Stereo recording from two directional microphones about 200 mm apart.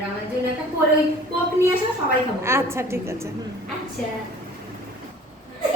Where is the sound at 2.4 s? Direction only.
15° right (ahead or behind).